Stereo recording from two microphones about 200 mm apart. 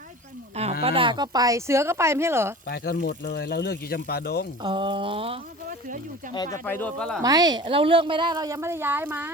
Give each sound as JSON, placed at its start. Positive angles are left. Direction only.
{"t": 0.8, "sound": "speech", "side_deg": -25}
{"t": 2.6, "sound": "speech", "side_deg": 50}
{"t": 4.6, "sound": "speech", "side_deg": -25}
{"t": 6.3, "sound": "speech", "side_deg": 20}
{"t": 6.7, "sound": "speech", "side_deg": 10}
{"t": 7.2, "sound": "speech", "side_deg": -20}